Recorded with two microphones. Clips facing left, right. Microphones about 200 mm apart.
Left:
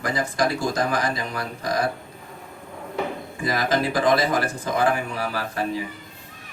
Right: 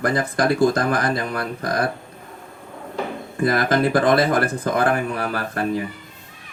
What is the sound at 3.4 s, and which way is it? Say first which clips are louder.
Speech: right 5 dB; 55° right (ahead or behind).